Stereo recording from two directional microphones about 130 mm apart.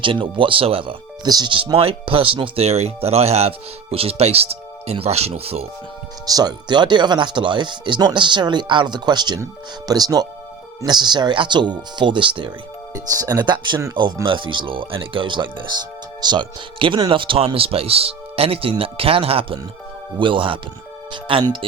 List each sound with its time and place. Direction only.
0.0 s speech: 40° right (ahead or behind)
6.2 s speech: 30° right (ahead or behind)
12.9 s speech: 25° right (ahead or behind)